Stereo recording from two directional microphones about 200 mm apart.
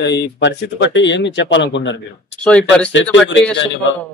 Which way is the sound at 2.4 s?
5° left (ahead or behind).